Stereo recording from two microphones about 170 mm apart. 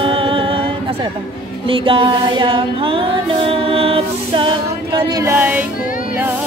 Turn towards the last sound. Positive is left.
turn(degrees=-10)  # may be behind; listen again after turning